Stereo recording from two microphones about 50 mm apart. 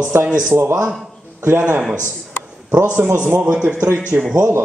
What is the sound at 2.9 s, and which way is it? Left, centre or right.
Speech, right.